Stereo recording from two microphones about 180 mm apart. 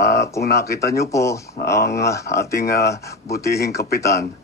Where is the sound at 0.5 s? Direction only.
15° left (ahead or behind).